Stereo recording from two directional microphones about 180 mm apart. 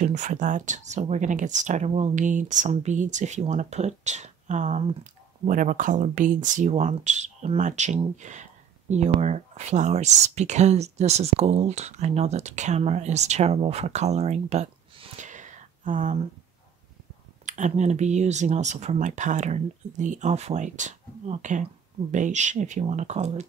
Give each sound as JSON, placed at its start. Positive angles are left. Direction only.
{"t": 0.0, "sound": "speech", "side_deg": -40}
{"t": 17.5, "sound": "speech", "side_deg": -40}